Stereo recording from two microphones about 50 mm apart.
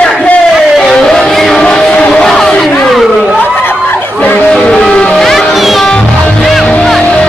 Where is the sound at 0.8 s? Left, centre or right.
Centre.